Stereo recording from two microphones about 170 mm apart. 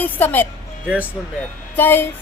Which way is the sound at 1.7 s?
10° left (ahead or behind).